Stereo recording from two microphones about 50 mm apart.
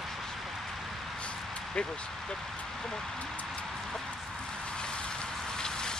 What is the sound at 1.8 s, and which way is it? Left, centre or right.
Speech, left.